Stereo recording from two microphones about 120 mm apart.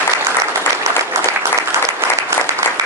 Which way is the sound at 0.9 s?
25° right (ahead or behind).